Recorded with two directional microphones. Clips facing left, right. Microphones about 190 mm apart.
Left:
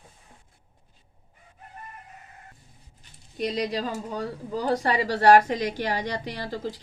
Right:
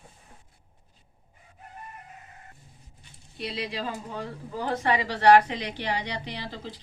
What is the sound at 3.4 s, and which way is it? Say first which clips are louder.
Speech: left 6 dB; 45° left (ahead or behind).